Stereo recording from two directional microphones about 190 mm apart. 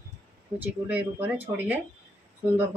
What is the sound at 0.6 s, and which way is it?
Speech, 10° right (ahead or behind).